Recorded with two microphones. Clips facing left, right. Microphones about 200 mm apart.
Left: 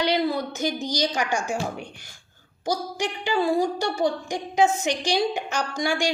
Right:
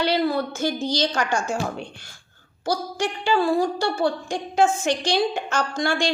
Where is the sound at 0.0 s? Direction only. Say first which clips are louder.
Right 2 dB; 20° left (ahead or behind).